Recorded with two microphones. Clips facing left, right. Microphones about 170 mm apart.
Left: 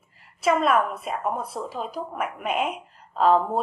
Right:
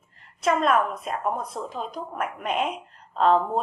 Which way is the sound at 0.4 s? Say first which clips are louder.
Left 1 dB; 5° left (ahead or behind).